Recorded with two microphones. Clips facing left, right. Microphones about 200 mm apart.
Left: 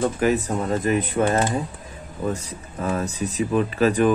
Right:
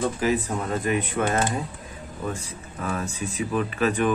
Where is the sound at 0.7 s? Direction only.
35° left (ahead or behind).